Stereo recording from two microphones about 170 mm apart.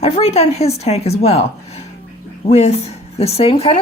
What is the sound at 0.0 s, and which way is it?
Speech, 40° left (ahead or behind).